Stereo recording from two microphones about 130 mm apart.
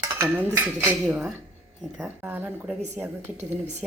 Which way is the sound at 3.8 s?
Centre (ahead or behind).